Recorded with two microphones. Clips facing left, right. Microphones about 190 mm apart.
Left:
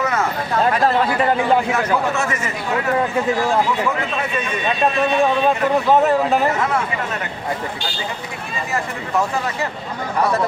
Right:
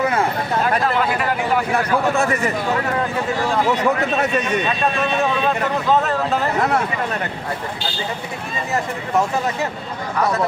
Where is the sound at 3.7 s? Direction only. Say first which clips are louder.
Right 3 dB; 40° right (ahead or behind).